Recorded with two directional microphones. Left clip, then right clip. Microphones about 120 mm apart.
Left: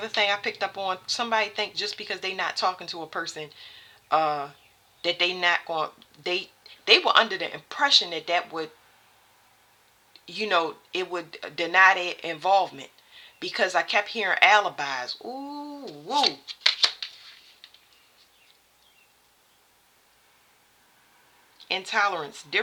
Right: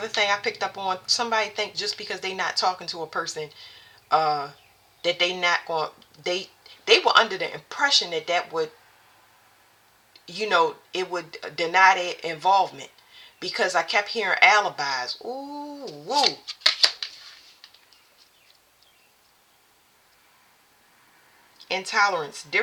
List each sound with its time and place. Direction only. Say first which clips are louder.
0.0 s a woman's voice: right 1 dB; 35° left (ahead or behind)
10.1 s a woman's voice: right 2 dB; 35° left (ahead or behind); by 16.9 s 15° left (ahead or behind)
21.7 s a woman's voice: right 3 dB; 35° left (ahead or behind)